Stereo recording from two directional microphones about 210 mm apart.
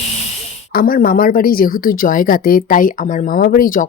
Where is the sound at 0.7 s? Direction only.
45° left (ahead or behind).